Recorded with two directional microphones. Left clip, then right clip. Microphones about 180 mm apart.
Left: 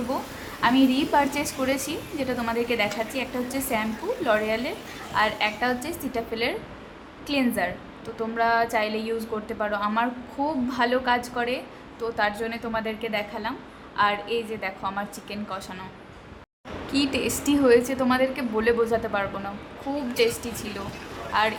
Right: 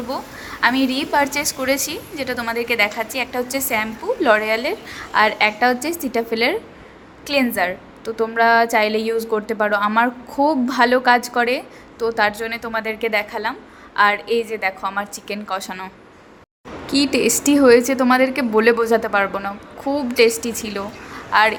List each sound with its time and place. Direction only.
0.6 s a woman's voice: 30° right (ahead or behind)
16.9 s a woman's voice: 25° right (ahead or behind)